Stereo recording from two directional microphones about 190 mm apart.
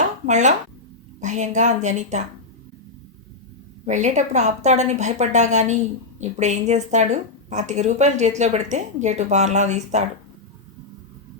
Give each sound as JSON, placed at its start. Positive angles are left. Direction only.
{"t": 0.3, "sound": "a woman's voice", "side_deg": -40}
{"t": 3.8, "sound": "a woman's voice", "side_deg": -40}